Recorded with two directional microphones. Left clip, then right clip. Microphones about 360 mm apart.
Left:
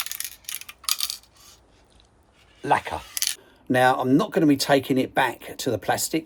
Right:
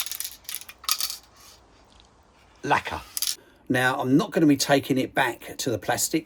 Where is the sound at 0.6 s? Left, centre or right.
Centre.